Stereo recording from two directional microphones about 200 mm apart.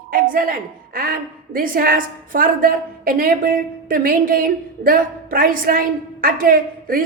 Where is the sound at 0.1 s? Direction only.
45° right (ahead or behind).